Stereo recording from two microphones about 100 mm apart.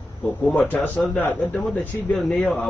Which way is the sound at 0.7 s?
15° left (ahead or behind).